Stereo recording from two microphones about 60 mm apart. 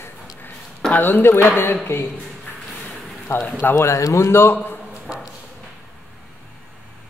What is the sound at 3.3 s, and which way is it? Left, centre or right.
A man's voice, left.